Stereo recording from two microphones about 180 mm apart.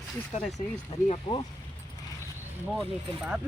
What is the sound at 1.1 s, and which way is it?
Speech, 25° left (ahead or behind).